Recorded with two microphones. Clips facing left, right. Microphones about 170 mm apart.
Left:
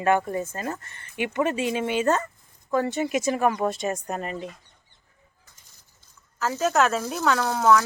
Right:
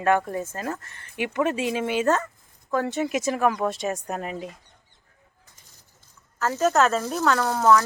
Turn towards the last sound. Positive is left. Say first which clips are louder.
# right 1 dB
turn(degrees=0)  # may be behind; listen again after turning